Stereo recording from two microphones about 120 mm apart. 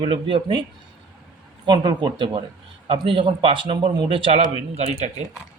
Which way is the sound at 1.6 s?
40° right (ahead or behind).